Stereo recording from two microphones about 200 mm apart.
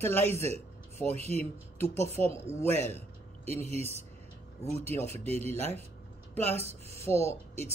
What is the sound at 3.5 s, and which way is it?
Speech, 30° right (ahead or behind).